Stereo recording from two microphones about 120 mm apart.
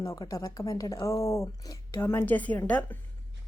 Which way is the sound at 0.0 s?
25° left (ahead or behind).